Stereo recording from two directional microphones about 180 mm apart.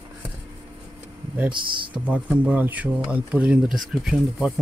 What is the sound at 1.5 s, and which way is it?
Speech, 25° right (ahead or behind).